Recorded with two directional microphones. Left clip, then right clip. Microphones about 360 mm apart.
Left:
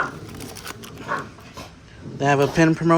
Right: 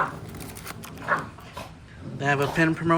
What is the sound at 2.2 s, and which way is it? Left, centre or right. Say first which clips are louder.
Speech: left 5 dB; centre.